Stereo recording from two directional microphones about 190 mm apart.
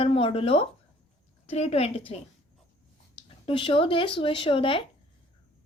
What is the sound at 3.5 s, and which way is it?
Speech, 25° left (ahead or behind).